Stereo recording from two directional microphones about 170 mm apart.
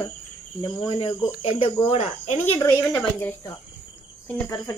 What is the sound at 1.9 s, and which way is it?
Cricket, 40° left (ahead or behind).